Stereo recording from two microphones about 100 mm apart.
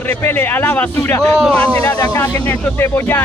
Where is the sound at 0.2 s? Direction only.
20° left (ahead or behind).